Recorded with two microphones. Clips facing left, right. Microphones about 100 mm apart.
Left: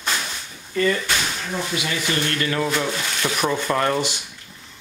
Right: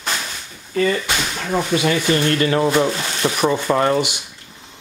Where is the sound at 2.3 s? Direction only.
30° right (ahead or behind).